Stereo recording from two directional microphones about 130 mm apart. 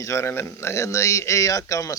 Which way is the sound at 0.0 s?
20° left (ahead or behind).